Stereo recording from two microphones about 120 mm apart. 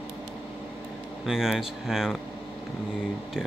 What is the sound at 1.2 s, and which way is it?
Speech, 5° right (ahead or behind).